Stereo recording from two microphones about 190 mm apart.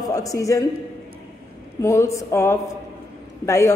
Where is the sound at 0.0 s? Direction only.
20° left (ahead or behind).